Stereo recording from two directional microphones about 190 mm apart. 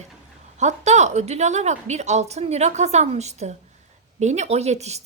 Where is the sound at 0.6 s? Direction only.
35° right (ahead or behind).